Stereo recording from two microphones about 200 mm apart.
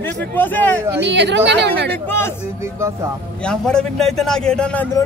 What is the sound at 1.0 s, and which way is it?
Speech, 60° right (ahead or behind).